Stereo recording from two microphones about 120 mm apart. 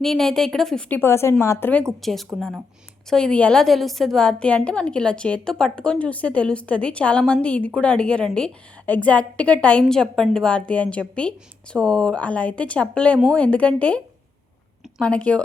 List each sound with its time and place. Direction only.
0.0 s speech: 5° left (ahead or behind)
0.9 s a woman's voice: 20° left (ahead or behind)
2.0 s a woman's voice: centre (ahead or behind)